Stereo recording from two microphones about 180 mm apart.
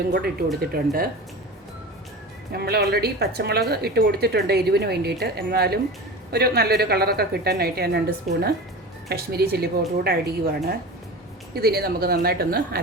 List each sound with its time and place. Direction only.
0.1 s speech: 60° right (ahead or behind)
2.5 s speech: 60° right (ahead or behind)